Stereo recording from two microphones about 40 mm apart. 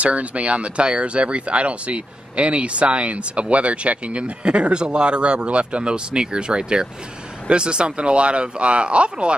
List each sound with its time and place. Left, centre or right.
0.0 s speech: right